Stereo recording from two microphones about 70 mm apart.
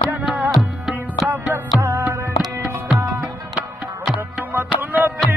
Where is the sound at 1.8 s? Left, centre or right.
Right.